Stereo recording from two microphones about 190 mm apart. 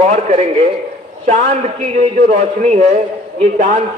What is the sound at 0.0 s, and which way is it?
A man's voice, 35° right (ahead or behind).